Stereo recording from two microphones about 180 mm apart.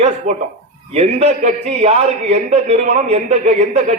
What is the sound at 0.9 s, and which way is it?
A man's voice, 35° right (ahead or behind).